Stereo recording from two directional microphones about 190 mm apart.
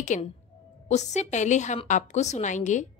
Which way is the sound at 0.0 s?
40° left (ahead or behind).